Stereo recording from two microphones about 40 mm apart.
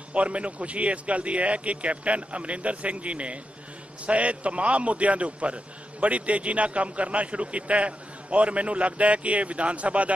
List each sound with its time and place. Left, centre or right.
0.1 s a man's voice: right